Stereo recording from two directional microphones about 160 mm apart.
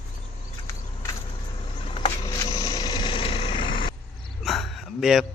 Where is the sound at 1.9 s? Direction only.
35° left (ahead or behind).